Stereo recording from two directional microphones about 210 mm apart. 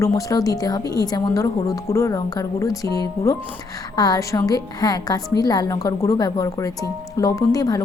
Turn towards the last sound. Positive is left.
turn(degrees=15)  # may be behind; listen again after turning